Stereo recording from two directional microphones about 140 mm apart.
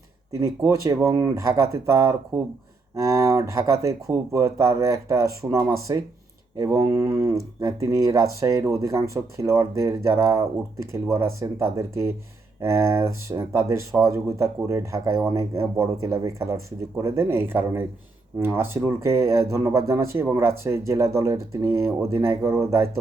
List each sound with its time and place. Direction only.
0.3 s speech: 20° right (ahead or behind)